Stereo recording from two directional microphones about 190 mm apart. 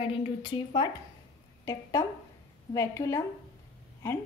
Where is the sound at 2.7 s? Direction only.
15° left (ahead or behind).